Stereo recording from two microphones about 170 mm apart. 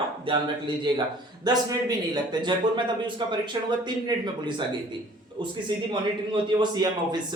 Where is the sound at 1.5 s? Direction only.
25° right (ahead or behind).